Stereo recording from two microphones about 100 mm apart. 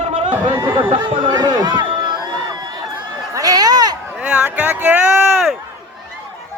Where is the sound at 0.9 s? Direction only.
60° right (ahead or behind).